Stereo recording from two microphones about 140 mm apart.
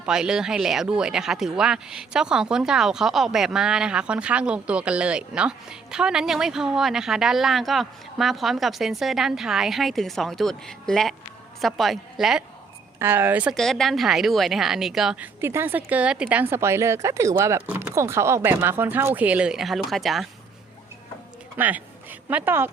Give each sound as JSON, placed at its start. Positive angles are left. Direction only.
{"t": 0.0, "sound": "speech", "side_deg": -5}
{"t": 13.0, "sound": "a woman's voice", "side_deg": -15}
{"t": 13.6, "sound": "a woman's voice", "side_deg": 0}
{"t": 21.6, "sound": "a woman's voice", "side_deg": -15}